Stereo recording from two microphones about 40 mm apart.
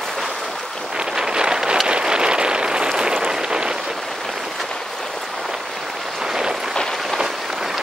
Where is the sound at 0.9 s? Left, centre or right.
Centre.